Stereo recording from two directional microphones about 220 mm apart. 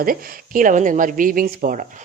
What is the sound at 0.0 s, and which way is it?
Speech, 40° right (ahead or behind).